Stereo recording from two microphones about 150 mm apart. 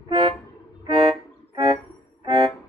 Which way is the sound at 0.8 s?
40° right (ahead or behind).